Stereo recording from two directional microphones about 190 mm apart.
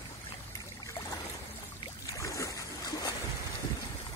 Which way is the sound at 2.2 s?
15° left (ahead or behind).